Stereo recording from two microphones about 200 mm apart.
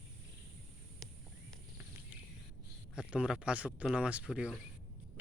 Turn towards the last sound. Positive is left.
turn(degrees=-5)  # may be behind; listen again after turning